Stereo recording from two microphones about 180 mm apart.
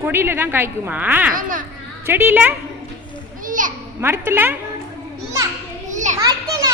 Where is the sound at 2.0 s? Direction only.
10° right (ahead or behind).